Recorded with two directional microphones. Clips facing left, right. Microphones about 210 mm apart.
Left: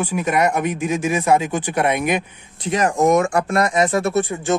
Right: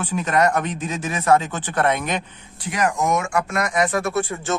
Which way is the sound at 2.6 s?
25° left (ahead or behind).